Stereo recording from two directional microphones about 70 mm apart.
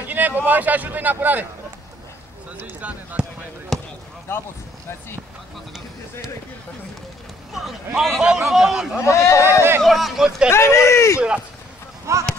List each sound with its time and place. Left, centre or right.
0.0 s a sound: right
0.5 s a man's voice: right
2.5 s speech: right
3.7 s basketball bounce: centre
4.3 s speech: left
7.5 s speech: centre
9.0 s speech: left
9.8 s speech: centre
10.5 s speech: left
11.1 s speech: centre
12.1 s speech: right